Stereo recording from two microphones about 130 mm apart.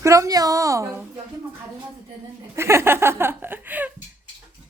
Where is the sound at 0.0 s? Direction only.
25° right (ahead or behind).